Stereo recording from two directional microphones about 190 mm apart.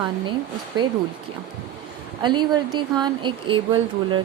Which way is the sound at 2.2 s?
25° right (ahead or behind).